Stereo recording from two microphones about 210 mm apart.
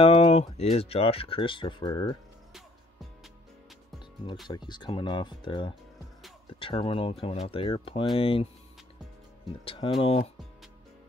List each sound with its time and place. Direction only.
0.0 s speech: 30° left (ahead or behind)
4.5 s speech: 20° left (ahead or behind)
9.7 s speech: 25° left (ahead or behind)